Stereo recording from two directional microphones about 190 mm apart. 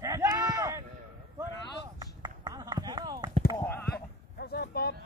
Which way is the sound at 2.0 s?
20° right (ahead or behind).